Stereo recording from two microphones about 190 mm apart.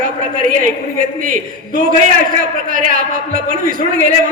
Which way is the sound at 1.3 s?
45° right (ahead or behind).